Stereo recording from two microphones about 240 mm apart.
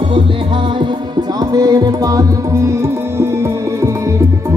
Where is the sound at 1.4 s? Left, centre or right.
Centre.